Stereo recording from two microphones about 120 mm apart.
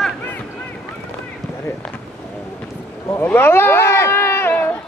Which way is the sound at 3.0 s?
20° left (ahead or behind).